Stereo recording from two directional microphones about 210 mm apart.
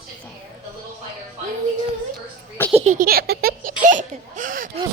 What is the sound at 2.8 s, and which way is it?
Baby laughter, 40° right (ahead or behind).